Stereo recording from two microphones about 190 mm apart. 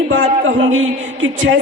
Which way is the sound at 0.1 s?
85° right.